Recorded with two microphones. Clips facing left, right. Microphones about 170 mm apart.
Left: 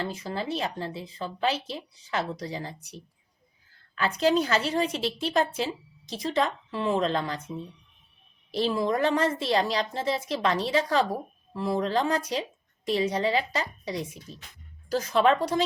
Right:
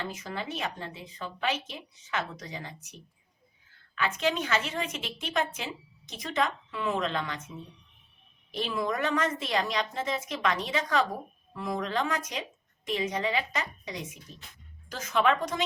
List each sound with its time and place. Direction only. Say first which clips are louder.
0.0 s a woman's voice: left 4 dB; 30° left (ahead or behind)
8.5 s a woman's voice: left 5 dB; 30° left (ahead or behind)